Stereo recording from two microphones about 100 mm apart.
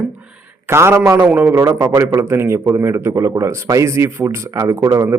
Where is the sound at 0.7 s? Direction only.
25° right (ahead or behind).